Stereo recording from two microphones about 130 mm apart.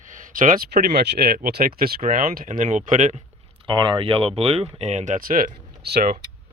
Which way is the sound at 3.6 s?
40° right (ahead or behind).